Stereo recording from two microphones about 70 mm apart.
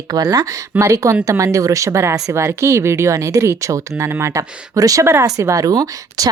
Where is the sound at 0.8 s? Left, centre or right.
Right.